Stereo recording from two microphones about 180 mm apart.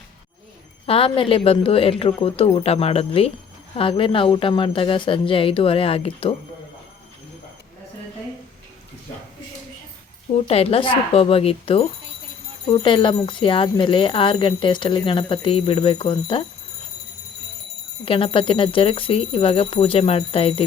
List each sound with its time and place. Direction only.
0.9 s speech: 30° left (ahead or behind)
10.3 s speech: 35° left (ahead or behind)
18.0 s speech: 30° left (ahead or behind)